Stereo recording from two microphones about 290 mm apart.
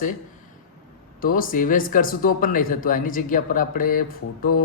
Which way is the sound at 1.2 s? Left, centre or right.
Left.